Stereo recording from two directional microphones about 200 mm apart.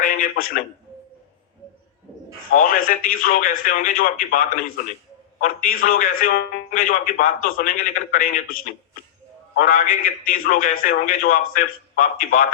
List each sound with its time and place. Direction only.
0.0 s a man's voice: 45° left (ahead or behind)
2.5 s a man's voice: 45° left (ahead or behind)